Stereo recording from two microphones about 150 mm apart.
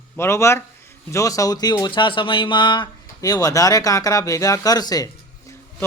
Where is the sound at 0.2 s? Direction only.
20° left (ahead or behind).